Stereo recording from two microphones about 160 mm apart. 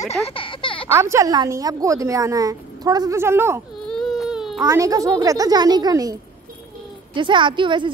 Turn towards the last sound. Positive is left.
turn(degrees=-30)  # may be behind; listen again after turning